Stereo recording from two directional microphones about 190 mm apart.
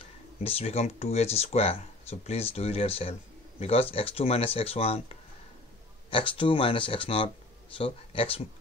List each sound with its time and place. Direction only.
0.4 s speech: 30° left (ahead or behind)
6.0 s speech: 25° left (ahead or behind)